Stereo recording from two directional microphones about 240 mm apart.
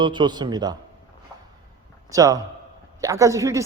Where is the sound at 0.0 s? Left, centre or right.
Centre.